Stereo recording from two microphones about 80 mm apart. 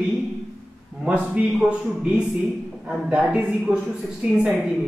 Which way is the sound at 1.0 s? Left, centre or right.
Centre.